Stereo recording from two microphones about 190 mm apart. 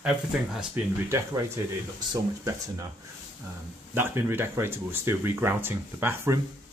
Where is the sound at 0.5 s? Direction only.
10° right (ahead or behind).